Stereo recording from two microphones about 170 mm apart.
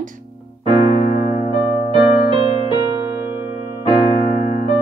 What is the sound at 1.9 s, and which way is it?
Music, 30° right (ahead or behind).